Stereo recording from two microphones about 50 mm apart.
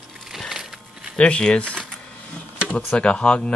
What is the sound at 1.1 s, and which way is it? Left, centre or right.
Speech, centre.